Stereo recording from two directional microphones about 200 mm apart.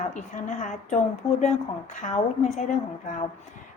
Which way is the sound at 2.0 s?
40° left (ahead or behind).